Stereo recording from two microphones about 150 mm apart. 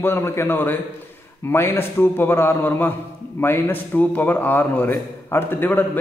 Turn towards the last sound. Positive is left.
turn(degrees=15)  # may be behind; listen again after turning